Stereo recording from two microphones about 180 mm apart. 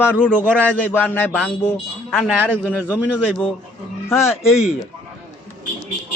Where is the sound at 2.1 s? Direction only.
5° right (ahead or behind).